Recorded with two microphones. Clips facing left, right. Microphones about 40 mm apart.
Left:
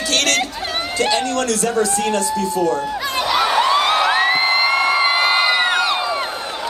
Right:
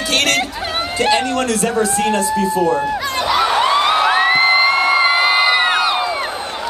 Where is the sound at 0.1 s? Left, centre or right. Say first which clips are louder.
Right 2 dB; right.